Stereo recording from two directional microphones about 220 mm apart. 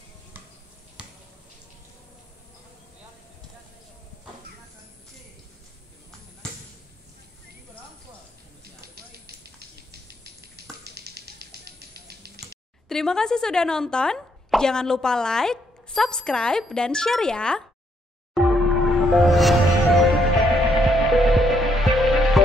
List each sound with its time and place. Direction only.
9.8 s a sound: 45° right (ahead or behind)
12.8 s speech: centre (ahead or behind)
18.3 s music: centre (ahead or behind)